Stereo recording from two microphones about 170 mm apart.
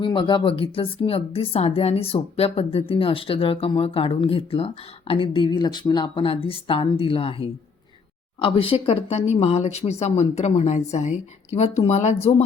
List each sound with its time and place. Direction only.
0.0 s speech: 30° left (ahead or behind)